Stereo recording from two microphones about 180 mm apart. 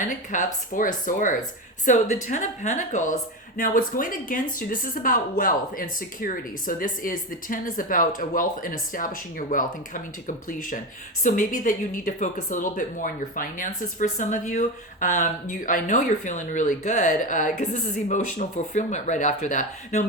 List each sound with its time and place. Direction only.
0.0 s speech: 45° left (ahead or behind)